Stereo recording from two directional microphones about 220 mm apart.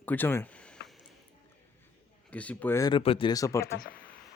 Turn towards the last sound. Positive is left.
turn(degrees=15)  # may be behind; listen again after turning